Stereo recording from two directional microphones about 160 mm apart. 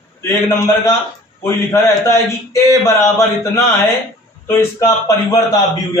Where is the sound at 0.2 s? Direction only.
15° left (ahead or behind).